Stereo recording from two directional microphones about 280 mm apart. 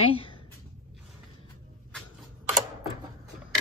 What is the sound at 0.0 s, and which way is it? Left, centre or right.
Speech, centre.